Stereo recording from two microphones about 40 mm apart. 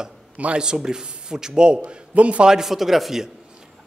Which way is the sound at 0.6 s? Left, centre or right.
Centre.